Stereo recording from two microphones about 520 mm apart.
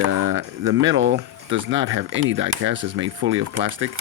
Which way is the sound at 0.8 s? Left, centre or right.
Right.